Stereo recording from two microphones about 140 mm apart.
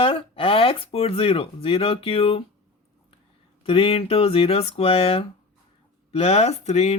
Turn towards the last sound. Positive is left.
turn(degrees=50)  # may be behind; listen again after turning